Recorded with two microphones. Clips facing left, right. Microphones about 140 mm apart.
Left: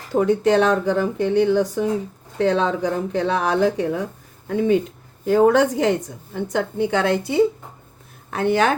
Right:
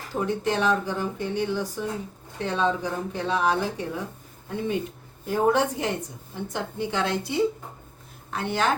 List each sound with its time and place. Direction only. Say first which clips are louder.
0.1 s a woman's voice: left 9 dB; 75° left (ahead or behind)
6.3 s a woman's voice: left 9 dB; 70° left (ahead or behind)